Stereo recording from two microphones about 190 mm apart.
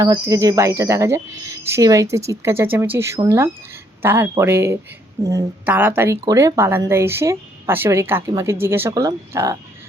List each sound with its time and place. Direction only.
0.0 s speech: 15° right (ahead or behind)